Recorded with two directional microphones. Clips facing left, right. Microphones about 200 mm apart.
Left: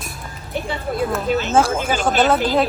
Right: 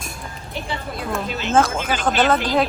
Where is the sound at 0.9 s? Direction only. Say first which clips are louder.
Left 8 dB; 55° left (ahead or behind).